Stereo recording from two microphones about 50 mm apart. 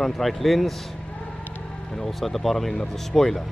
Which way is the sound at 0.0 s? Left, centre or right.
Centre.